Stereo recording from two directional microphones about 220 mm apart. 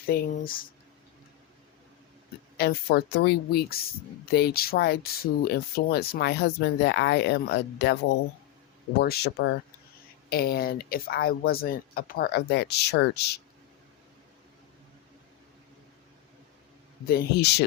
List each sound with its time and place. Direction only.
0.0 s speech: 40° left (ahead or behind)
2.6 s speech: 45° left (ahead or behind)
17.1 s speech: 45° left (ahead or behind)